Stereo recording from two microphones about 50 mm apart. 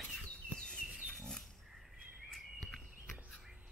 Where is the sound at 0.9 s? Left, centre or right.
Centre.